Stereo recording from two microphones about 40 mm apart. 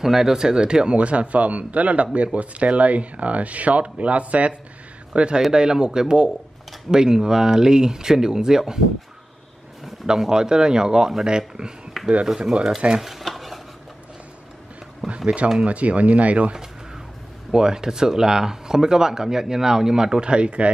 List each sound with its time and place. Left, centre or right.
0.0 s speech: centre
10.0 s speech: centre
12.0 s a sound: centre
15.0 s a sound: centre
15.6 s speech: right
17.5 s speech: centre